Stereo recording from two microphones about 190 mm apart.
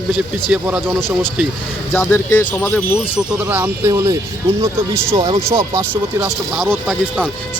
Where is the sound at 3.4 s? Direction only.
10° right (ahead or behind).